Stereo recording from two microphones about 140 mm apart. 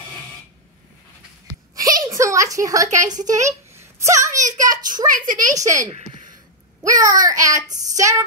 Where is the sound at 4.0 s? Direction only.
20° right (ahead or behind).